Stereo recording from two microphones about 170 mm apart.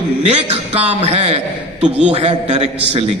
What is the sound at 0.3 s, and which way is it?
A man's voice, 40° right (ahead or behind).